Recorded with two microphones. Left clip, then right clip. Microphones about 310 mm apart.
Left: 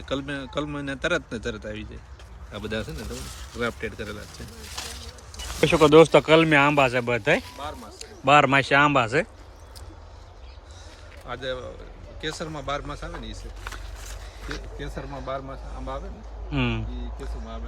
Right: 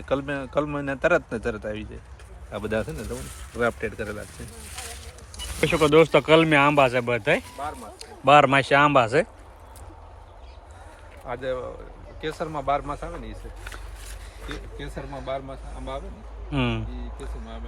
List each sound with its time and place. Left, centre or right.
0.0 s speech: centre
5.5 s speech: centre
11.3 s speech: centre
14.5 s speech: centre